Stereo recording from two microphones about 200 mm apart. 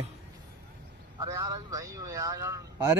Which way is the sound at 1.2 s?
15° right (ahead or behind).